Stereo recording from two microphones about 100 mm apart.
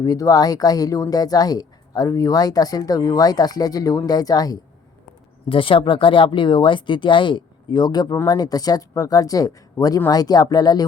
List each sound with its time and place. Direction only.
0.0 s speech: 35° left (ahead or behind)
5.5 s speech: 65° left (ahead or behind); by 10.8 s 45° left (ahead or behind)